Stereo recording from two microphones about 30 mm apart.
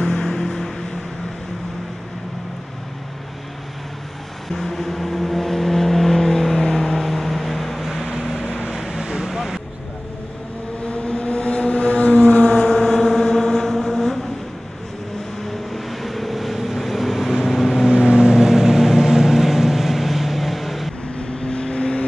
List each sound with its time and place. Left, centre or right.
0.0 s vehicle: left
4.5 s vehicle: centre
8.5 s vehicle: centre
9.3 s vehicle: centre
10.9 s vehicle: left
12.4 s vehicle: left
12.6 s vehicle: centre
15.7 s vehicle: centre
17.8 s vehicle: right
18.3 s vehicle: centre
21.5 s vehicle: left